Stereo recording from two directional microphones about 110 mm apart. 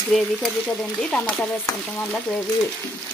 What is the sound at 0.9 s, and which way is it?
Frying, 10° left (ahead or behind).